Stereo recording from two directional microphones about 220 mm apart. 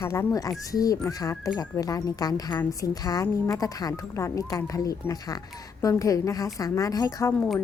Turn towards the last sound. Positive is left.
turn(degrees=15)  # may be behind; listen again after turning